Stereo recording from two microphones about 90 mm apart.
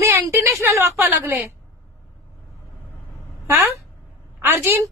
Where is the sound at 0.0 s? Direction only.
25° right (ahead or behind).